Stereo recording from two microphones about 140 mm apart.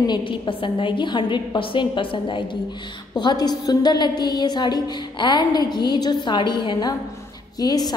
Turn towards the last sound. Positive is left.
turn(degrees=30)  # may be behind; listen again after turning